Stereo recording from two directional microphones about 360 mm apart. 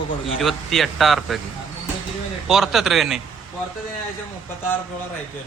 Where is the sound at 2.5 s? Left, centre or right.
Centre.